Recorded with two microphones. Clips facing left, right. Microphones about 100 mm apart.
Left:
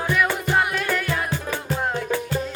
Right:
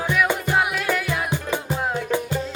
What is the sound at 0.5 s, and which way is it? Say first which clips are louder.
Music: left 1 dB; 5° right (ahead or behind).